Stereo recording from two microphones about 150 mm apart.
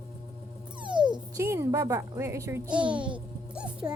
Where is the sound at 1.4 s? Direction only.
20° right (ahead or behind).